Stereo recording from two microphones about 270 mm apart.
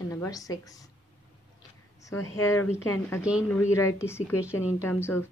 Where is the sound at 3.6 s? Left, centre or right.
Centre.